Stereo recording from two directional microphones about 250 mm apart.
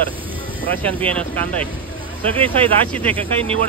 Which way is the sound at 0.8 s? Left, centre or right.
Centre.